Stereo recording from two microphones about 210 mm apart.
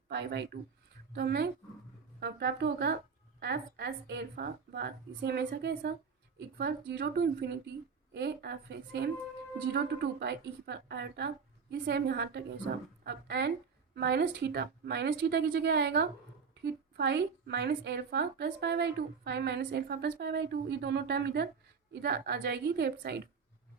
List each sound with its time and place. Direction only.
0.1 s a woman's voice: 55° right (ahead or behind)